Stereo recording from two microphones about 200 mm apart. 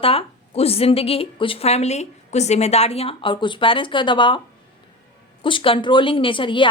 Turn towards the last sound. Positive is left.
turn(degrees=25)  # may be behind; listen again after turning